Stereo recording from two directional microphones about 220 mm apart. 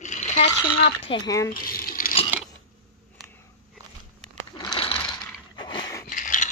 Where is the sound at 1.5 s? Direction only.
40° left (ahead or behind).